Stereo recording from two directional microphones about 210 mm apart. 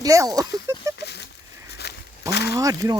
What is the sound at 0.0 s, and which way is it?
Speech, 15° right (ahead or behind).